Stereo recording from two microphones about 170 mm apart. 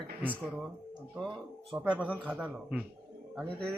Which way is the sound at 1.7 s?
10° right (ahead or behind).